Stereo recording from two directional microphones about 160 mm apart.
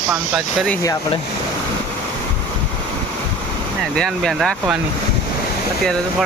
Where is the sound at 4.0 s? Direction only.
Centre (ahead or behind).